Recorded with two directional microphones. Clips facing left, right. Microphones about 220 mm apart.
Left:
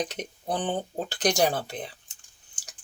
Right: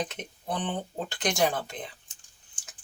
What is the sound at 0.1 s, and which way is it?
Speech, 40° left (ahead or behind).